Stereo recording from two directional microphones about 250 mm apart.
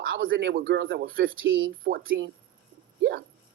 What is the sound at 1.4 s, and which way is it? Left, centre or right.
Speech, right.